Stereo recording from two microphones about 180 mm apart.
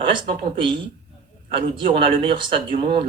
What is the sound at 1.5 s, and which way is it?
Speech, 30° right (ahead or behind).